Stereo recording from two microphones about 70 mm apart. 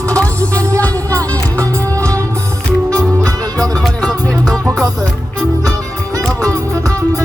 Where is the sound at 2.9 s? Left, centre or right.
Right.